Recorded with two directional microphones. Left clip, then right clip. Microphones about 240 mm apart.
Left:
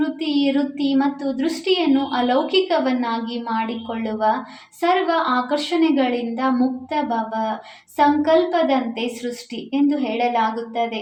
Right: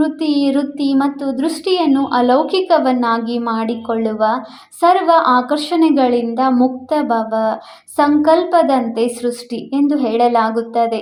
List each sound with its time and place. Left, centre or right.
0.0 s a woman's voice: right